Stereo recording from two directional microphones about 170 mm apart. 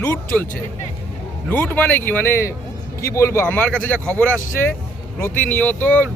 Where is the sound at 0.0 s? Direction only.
15° left (ahead or behind).